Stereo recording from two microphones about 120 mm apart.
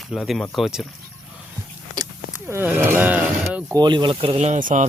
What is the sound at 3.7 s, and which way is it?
Speech, 40° right (ahead or behind).